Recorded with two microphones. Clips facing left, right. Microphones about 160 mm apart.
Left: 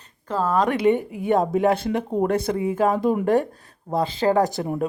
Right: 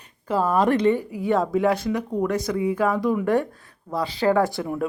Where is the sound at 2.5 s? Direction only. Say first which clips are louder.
Left 1 dB; 40° left (ahead or behind).